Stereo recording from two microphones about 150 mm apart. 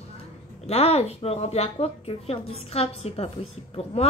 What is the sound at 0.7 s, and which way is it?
A woman's voice, 45° left (ahead or behind).